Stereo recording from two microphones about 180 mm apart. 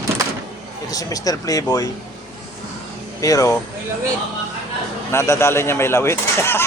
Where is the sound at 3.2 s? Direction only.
20° left (ahead or behind).